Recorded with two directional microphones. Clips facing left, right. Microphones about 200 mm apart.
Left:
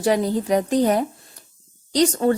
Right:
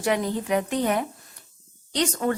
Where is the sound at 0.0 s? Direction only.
35° left (ahead or behind).